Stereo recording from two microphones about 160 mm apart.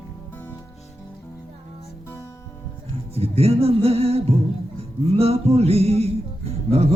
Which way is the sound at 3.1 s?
40° right (ahead or behind).